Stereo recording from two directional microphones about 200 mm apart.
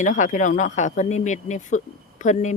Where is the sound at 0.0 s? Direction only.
40° left (ahead or behind).